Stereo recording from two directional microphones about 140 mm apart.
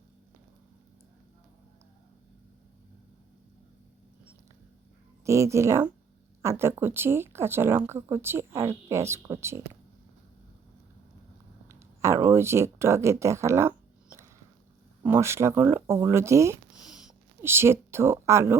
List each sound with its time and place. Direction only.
5.2 s speech: 20° right (ahead or behind)
11.7 s speech: 20° right (ahead or behind)
15.0 s speech: 20° right (ahead or behind)
16.8 s a sound: 5° right (ahead or behind)
17.4 s speech: 15° right (ahead or behind)